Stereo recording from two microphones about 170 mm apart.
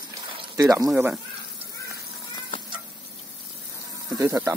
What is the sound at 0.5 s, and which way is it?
Speech, 20° right (ahead or behind).